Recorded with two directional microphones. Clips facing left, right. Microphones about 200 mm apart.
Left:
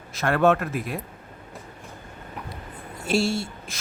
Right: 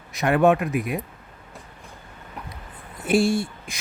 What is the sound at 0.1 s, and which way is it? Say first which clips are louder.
Speech: right 2 dB; 15° right (ahead or behind).